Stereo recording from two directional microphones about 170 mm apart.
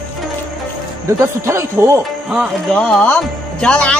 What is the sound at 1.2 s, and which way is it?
Speech, 15° right (ahead or behind).